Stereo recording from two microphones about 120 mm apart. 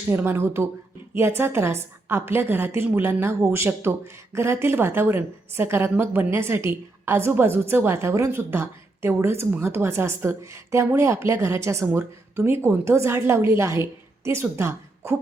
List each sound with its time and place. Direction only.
0.1 s a woman's voice: 15° right (ahead or behind)